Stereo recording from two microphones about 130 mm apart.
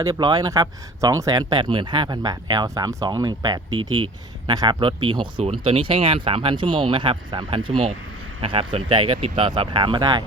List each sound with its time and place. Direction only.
0.0 s speech: 30° right (ahead or behind)